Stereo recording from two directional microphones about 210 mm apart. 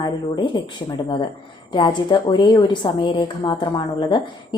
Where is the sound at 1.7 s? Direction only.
20° left (ahead or behind).